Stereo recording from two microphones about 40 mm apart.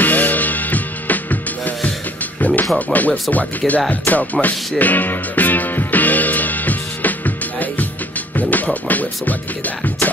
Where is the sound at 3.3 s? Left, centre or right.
Left.